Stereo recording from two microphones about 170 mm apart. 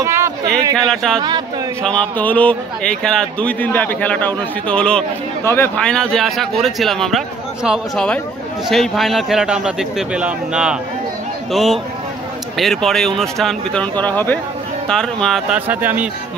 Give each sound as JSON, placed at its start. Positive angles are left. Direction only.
{"t": 0.0, "sound": "a sound", "side_deg": -15}
{"t": 0.7, "sound": "a man's voice", "side_deg": 5}
{"t": 15.7, "sound": "speech", "side_deg": -10}